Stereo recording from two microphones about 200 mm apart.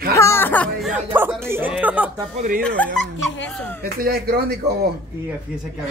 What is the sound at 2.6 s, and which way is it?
Speech, 5° left (ahead or behind).